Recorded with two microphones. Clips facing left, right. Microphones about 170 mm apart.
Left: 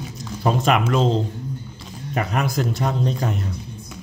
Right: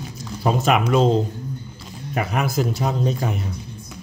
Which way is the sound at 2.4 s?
5° right (ahead or behind).